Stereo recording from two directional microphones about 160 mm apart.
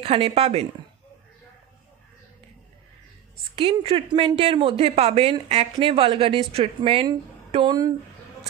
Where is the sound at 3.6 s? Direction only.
35° right (ahead or behind).